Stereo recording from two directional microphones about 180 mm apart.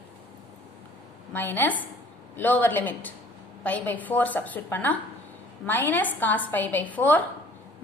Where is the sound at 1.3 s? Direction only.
10° left (ahead or behind).